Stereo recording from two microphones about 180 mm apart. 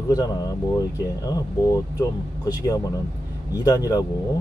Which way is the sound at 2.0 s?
20° left (ahead or behind).